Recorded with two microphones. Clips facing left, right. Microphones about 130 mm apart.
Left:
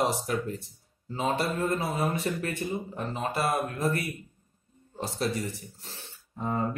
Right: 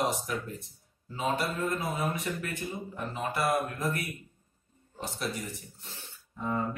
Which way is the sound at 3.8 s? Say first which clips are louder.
Left 4 dB; 30° left (ahead or behind).